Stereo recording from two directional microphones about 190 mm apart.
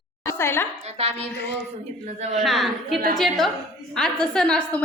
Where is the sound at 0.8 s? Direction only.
35° right (ahead or behind).